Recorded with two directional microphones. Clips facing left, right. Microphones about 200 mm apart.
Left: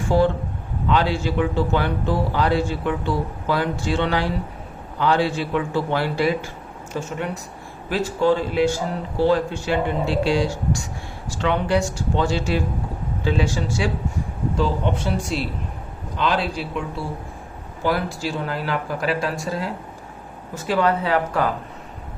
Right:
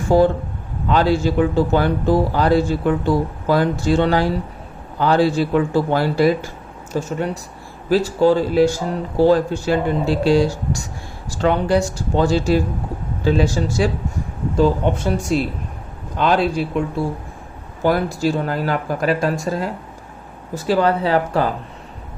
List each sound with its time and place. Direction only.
0.1 s a man's voice: 45° right (ahead or behind)
17.8 s speech: 45° right (ahead or behind)
20.7 s a man's voice: 35° right (ahead or behind)